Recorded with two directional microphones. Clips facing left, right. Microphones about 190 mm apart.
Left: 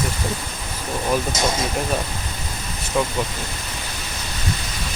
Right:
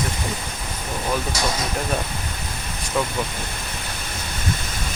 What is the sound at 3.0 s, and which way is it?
Speech, centre (ahead or behind).